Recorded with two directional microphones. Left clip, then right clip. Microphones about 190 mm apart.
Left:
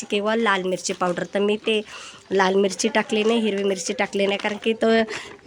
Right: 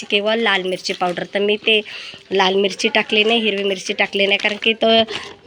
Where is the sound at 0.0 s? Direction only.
10° left (ahead or behind).